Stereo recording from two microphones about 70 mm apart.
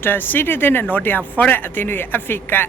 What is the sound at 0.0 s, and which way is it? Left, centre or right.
A man's voice, left.